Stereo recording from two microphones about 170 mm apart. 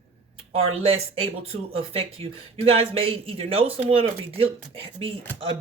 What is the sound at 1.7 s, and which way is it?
Speech, 35° right (ahead or behind).